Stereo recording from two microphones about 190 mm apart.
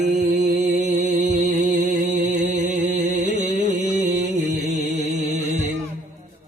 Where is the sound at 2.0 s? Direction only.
40° right (ahead or behind).